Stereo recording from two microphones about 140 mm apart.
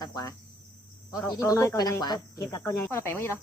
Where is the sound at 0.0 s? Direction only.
25° left (ahead or behind).